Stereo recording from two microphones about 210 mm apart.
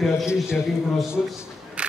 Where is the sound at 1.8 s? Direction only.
5° right (ahead or behind).